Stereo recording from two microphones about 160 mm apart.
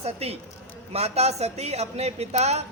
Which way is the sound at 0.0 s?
40° right (ahead or behind).